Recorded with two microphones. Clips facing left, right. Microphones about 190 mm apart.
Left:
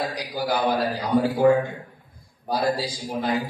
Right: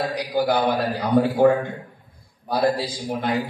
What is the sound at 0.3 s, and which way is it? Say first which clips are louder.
A man's voice: right 3 dB; 60° right (ahead or behind).